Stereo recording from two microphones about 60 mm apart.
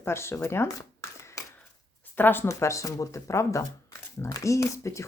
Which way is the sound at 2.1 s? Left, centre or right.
Left.